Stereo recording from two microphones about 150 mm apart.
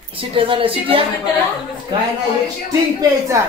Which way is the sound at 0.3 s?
35° right (ahead or behind).